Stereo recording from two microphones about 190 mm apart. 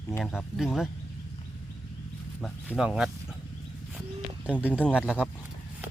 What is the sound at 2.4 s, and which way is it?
Speech, 5° right (ahead or behind).